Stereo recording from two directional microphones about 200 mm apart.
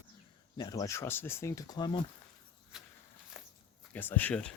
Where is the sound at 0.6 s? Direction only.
20° left (ahead or behind).